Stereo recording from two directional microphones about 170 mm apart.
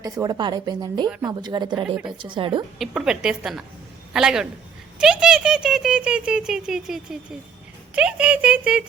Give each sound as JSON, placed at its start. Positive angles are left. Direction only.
{"t": 0.0, "sound": "speech", "side_deg": -25}
{"t": 2.7, "sound": "speech", "side_deg": 0}